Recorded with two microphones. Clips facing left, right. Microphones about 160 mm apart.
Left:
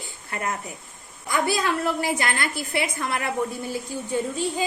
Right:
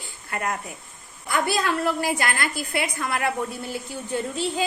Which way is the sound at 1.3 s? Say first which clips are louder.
Even; 20° left (ahead or behind).